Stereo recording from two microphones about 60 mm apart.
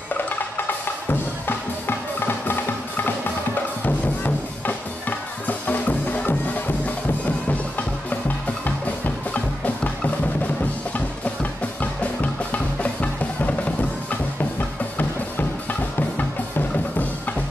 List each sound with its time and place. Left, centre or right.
0.2 s music: left
8.6 s music: left
11.8 s music: left
16.0 s music: left